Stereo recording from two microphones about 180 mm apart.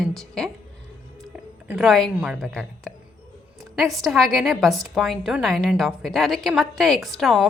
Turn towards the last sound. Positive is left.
turn(degrees=0)  # may be behind; listen again after turning